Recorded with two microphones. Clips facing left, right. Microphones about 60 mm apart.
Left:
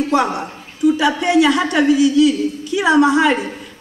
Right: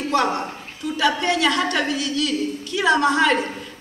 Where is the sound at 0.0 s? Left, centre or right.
Centre.